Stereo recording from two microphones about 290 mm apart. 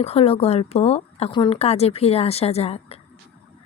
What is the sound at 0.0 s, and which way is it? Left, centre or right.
Speech, left.